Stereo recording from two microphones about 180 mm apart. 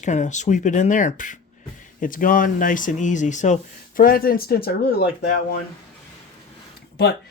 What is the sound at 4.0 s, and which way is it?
Speech, 55° left (ahead or behind).